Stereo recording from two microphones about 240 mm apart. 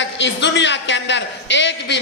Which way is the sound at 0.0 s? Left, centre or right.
Left.